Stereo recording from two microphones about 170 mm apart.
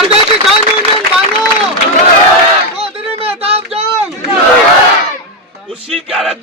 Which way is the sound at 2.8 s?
35° right (ahead or behind).